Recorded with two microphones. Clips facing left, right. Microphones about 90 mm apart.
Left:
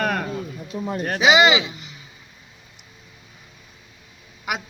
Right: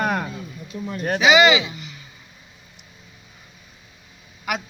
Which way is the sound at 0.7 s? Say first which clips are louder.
Left 3 dB; 35° left (ahead or behind).